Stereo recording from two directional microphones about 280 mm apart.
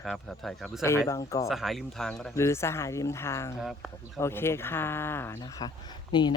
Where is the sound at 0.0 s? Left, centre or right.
Centre.